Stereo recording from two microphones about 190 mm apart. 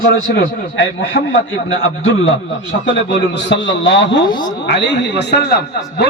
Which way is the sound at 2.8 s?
65° left (ahead or behind).